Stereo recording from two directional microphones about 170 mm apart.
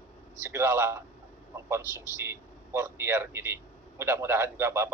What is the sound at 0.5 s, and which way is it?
A man's voice, 15° right (ahead or behind).